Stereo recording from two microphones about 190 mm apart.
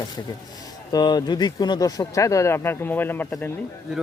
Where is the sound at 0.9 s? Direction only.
20° left (ahead or behind).